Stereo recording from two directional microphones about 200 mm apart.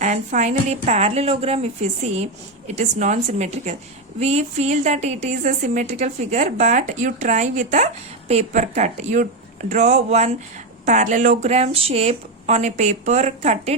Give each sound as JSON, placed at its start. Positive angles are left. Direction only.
{"t": 0.0, "sound": "a woman's voice", "side_deg": -35}